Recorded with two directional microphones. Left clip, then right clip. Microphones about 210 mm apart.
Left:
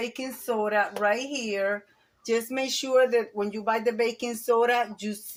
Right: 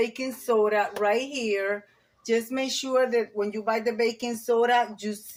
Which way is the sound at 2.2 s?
30° left (ahead or behind).